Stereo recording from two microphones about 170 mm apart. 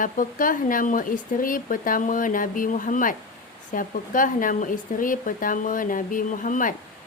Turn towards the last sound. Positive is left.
turn(degrees=50)  # may be behind; listen again after turning